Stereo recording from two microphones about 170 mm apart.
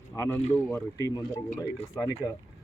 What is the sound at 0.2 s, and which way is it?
Speech, 15° left (ahead or behind).